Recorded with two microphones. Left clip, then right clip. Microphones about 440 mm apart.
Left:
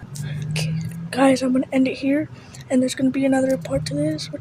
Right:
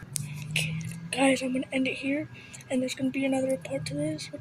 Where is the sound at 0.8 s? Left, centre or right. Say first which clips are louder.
Left 11 dB; right.